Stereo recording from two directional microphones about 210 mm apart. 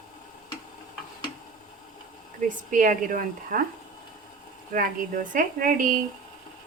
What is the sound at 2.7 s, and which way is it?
Speech, 40° right (ahead or behind).